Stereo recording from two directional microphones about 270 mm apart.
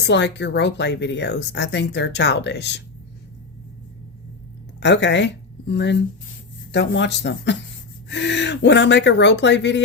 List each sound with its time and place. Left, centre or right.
0.1 s speech: left
4.8 s a woman's voice: left